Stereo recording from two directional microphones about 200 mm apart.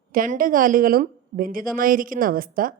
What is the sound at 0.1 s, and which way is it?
A woman's voice, 45° right (ahead or behind).